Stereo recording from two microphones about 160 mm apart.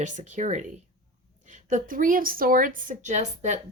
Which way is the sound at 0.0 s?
50° right (ahead or behind).